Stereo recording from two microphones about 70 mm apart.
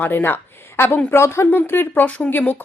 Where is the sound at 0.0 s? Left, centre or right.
Left.